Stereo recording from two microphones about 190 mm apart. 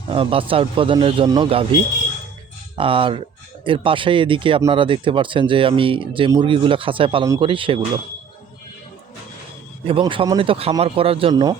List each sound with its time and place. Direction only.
0.1 s speech: 30° right (ahead or behind)
9.8 s speech: 25° right (ahead or behind)